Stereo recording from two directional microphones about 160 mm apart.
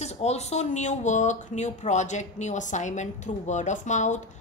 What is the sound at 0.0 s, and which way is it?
A woman's voice, 45° left (ahead or behind).